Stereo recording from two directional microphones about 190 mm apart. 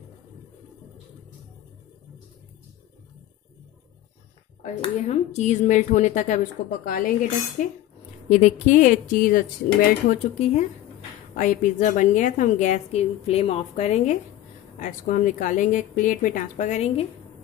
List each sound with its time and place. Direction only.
4.8 s a woman's voice: 35° left (ahead or behind)
8.3 s a woman's voice: 40° left (ahead or behind)